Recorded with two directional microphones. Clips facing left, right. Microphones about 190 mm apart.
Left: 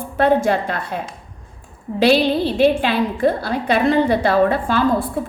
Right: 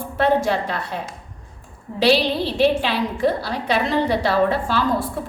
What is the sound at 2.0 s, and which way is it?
A woman's voice, 50° left (ahead or behind).